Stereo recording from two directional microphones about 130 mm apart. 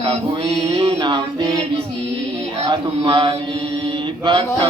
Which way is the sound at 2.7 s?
40° right (ahead or behind).